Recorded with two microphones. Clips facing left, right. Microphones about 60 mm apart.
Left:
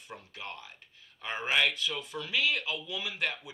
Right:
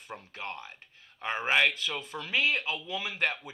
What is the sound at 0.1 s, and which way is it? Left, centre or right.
A man's voice, right.